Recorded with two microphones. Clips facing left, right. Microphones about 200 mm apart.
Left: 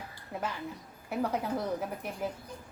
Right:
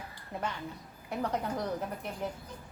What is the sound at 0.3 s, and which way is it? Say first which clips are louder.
A woman's voice: left 1 dB; centre (ahead or behind).